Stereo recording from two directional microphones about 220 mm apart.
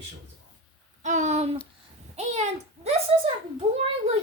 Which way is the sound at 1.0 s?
30° right (ahead or behind).